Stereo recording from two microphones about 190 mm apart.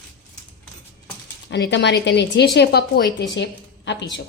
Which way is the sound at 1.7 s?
65° left (ahead or behind).